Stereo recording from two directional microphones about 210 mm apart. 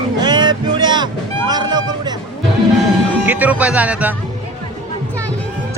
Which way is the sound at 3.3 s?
5° right (ahead or behind).